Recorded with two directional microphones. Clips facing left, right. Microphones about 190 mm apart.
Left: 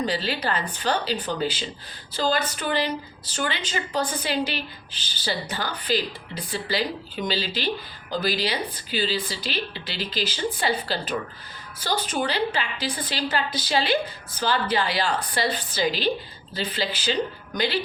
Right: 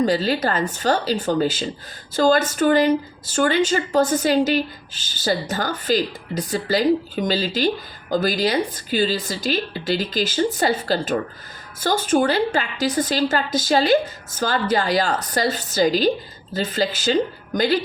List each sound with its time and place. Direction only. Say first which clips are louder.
0.0 s a woman's voice: right 7 dB; 45° right (ahead or behind)